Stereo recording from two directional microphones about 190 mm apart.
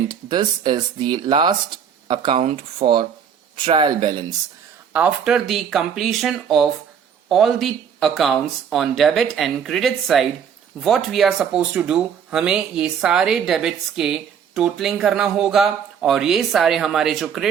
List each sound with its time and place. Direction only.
0.1 s speech: 25° right (ahead or behind)
4.9 s speech: 5° right (ahead or behind)